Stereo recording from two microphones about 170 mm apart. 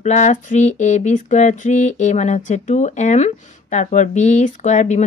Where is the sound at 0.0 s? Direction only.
45° left (ahead or behind).